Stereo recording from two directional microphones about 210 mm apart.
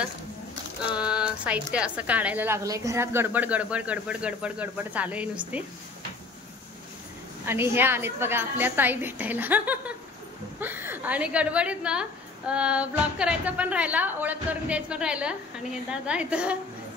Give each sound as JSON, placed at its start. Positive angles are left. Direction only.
{"t": 0.9, "sound": "a woman's voice", "side_deg": -5}
{"t": 7.4, "sound": "a woman's voice", "side_deg": -10}